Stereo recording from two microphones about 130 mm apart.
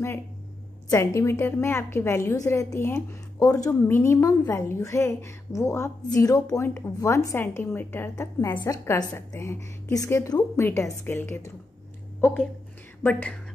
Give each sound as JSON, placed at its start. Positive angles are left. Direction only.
{"t": 0.8, "sound": "a woman's voice", "side_deg": 25}
{"t": 13.0, "sound": "a woman's voice", "side_deg": 10}